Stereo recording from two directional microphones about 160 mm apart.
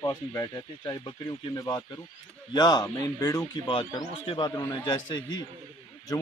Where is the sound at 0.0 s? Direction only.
20° left (ahead or behind).